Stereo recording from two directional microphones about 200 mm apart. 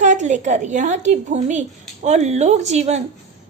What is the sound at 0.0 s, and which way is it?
A woman's voice, 40° right (ahead or behind).